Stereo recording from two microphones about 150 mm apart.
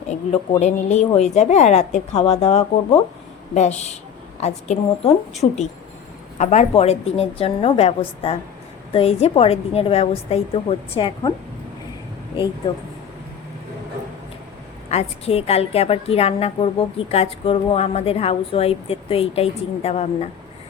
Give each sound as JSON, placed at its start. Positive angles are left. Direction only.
{"t": 0.6, "sound": "a woman's voice", "side_deg": 50}
{"t": 6.4, "sound": "a woman's voice", "side_deg": 50}
{"t": 14.8, "sound": "a woman's voice", "side_deg": 45}